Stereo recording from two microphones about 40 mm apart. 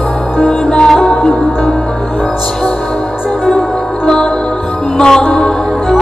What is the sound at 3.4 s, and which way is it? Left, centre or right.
Music, left.